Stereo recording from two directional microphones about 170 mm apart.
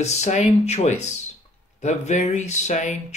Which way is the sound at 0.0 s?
40° left (ahead or behind).